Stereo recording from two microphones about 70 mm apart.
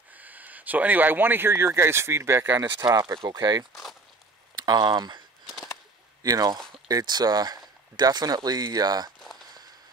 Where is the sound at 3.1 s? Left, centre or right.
Right.